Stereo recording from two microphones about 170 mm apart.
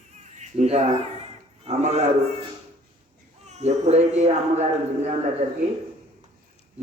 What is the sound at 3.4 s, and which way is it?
A man's voice, 40° right (ahead or behind).